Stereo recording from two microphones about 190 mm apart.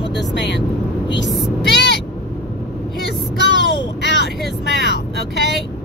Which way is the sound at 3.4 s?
65° left (ahead or behind).